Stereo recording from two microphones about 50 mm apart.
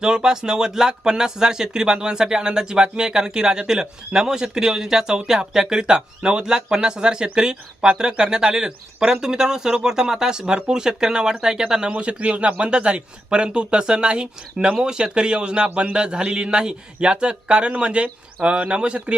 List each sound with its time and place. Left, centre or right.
0.0 s speech: centre